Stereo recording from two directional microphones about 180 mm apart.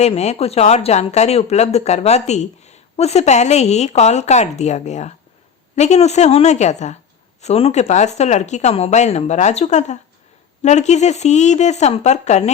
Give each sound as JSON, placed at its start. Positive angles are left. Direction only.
{"t": 0.0, "sound": "speech", "side_deg": 35}